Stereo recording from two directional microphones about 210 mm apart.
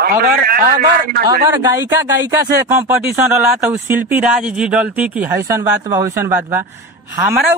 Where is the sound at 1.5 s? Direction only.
15° right (ahead or behind).